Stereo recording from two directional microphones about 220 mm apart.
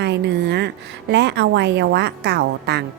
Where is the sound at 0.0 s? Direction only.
50° right (ahead or behind).